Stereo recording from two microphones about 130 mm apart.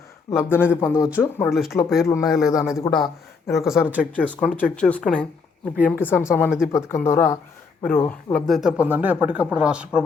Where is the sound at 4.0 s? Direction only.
10° left (ahead or behind).